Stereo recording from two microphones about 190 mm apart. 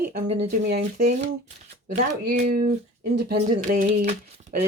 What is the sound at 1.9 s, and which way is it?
Speech, 40° right (ahead or behind).